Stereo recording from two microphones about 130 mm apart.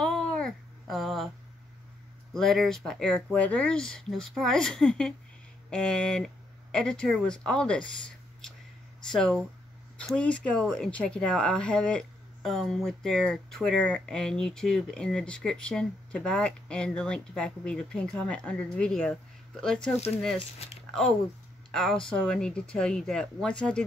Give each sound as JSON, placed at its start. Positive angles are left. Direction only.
{"t": 0.0, "sound": "babbling", "side_deg": 5}
{"t": 2.3, "sound": "speech", "side_deg": 5}
{"t": 7.9, "sound": "a sound", "side_deg": 5}
{"t": 9.1, "sound": "speech", "side_deg": 5}
{"t": 20.5, "sound": "speech", "side_deg": 55}
{"t": 21.7, "sound": "speech", "side_deg": 5}